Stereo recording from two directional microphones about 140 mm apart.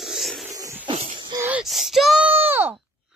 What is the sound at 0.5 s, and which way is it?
Wheeze, 25° right (ahead or behind).